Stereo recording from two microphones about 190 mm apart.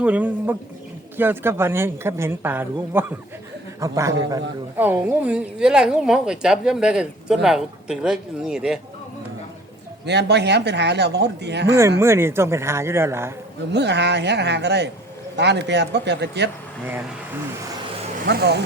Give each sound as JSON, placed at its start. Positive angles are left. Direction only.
{"t": 0.0, "sound": "a woman's voice", "side_deg": -10}
{"t": 10.1, "sound": "speech", "side_deg": -65}
{"t": 11.8, "sound": "speech", "side_deg": -15}
{"t": 13.7, "sound": "speech", "side_deg": -65}
{"t": 18.3, "sound": "speech", "side_deg": -60}